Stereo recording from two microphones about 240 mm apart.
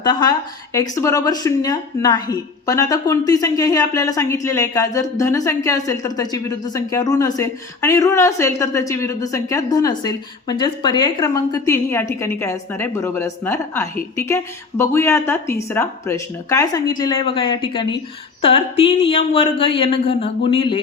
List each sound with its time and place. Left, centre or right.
0.0 s speech: centre